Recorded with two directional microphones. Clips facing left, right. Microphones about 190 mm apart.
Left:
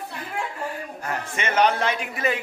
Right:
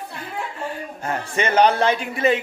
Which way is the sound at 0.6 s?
25° right (ahead or behind).